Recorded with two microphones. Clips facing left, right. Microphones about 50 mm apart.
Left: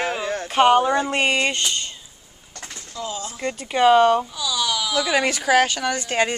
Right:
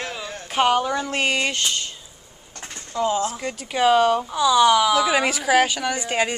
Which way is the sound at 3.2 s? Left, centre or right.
Centre.